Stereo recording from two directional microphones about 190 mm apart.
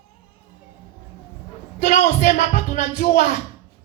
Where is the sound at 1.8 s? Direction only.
40° left (ahead or behind).